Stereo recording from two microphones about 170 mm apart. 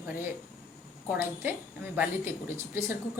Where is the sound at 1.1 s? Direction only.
10° right (ahead or behind).